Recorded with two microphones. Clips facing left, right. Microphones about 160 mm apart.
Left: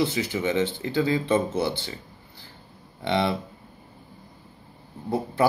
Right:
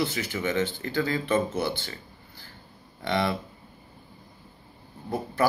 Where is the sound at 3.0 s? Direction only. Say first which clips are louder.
Left 2 dB; 20° left (ahead or behind).